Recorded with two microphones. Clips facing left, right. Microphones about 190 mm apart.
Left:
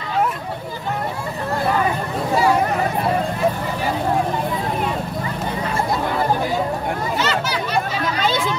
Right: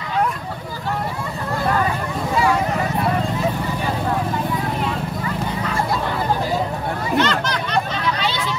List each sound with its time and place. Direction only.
7.2 s chatter: 5° left (ahead or behind)
8.2 s hubbub: 45° left (ahead or behind)